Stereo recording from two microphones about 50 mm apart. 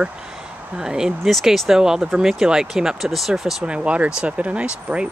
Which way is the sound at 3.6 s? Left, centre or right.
Right.